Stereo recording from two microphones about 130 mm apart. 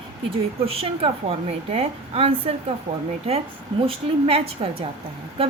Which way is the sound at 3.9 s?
45° right (ahead or behind).